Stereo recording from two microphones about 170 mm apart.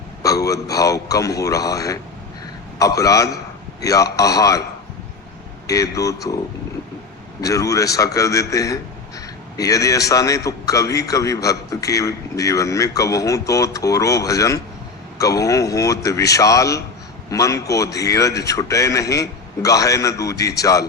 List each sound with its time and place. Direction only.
0.2 s a man's voice: 20° left (ahead or behind)
5.6 s a man's voice: 20° left (ahead or behind)
7.4 s a man's voice: 20° left (ahead or behind)